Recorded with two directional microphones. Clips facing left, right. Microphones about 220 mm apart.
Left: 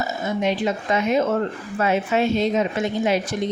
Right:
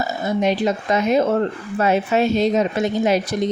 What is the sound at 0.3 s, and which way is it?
Speech, 40° right (ahead or behind).